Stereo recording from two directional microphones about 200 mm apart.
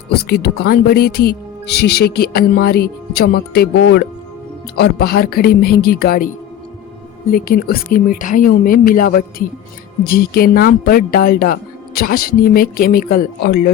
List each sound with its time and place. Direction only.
0.1 s speech: 55° left (ahead or behind)